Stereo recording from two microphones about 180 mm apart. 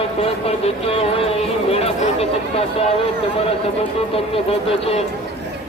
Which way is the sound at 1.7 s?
35° left (ahead or behind).